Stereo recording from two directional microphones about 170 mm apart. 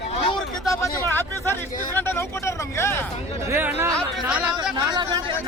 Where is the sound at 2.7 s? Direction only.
15° left (ahead or behind).